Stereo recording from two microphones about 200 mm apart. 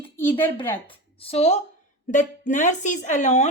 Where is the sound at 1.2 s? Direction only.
30° left (ahead or behind).